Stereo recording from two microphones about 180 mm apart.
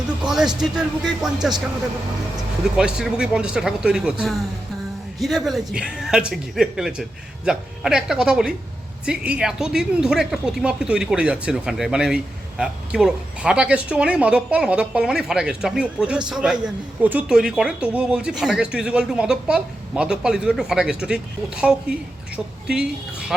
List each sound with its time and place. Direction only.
0.2 s a woman's voice: centre (ahead or behind)
2.7 s a woman's voice: 5° right (ahead or behind)